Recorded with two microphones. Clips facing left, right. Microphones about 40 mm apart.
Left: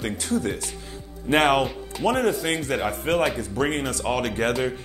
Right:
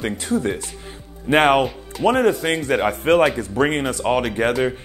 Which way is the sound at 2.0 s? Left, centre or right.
Right.